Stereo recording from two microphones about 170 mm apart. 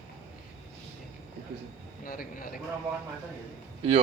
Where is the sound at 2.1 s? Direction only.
55° left (ahead or behind).